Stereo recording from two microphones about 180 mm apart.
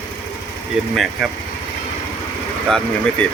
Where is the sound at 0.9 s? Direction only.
Centre (ahead or behind).